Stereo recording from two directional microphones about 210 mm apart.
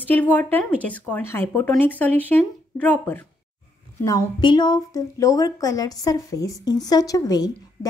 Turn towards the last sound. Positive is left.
turn(degrees=20)  # may be behind; listen again after turning